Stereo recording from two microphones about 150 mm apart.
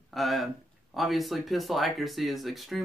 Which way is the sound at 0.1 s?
Centre (ahead or behind).